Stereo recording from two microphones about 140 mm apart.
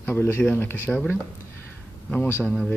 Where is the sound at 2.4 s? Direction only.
5° left (ahead or behind).